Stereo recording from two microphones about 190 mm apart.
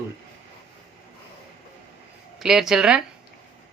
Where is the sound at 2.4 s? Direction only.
Centre (ahead or behind).